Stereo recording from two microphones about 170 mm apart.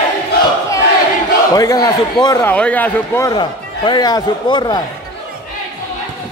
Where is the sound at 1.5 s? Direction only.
20° left (ahead or behind).